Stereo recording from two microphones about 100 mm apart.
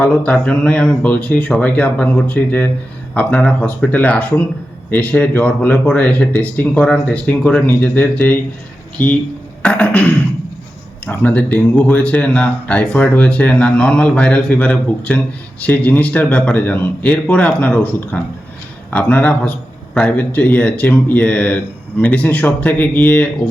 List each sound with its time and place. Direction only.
0.0 s a man's voice: 10° left (ahead or behind)